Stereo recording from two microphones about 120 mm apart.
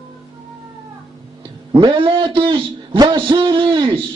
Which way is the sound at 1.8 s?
45° right (ahead or behind).